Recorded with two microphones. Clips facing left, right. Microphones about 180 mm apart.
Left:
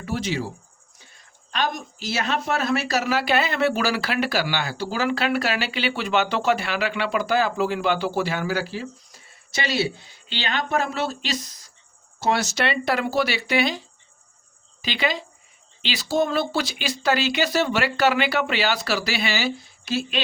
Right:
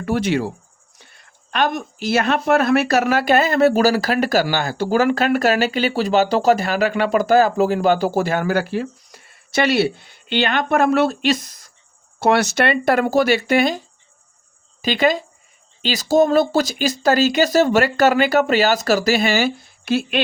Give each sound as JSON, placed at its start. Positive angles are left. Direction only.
{"t": 0.0, "sound": "a woman's voice", "side_deg": -60}